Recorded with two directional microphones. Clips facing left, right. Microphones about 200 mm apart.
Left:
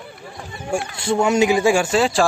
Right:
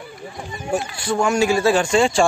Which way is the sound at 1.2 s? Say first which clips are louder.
Left 1 dB; 20° left (ahead or behind).